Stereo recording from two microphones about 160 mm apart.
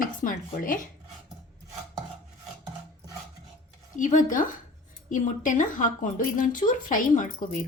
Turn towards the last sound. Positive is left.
turn(degrees=55)  # may be behind; listen again after turning